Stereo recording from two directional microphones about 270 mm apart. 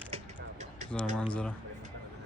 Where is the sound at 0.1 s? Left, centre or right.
Right.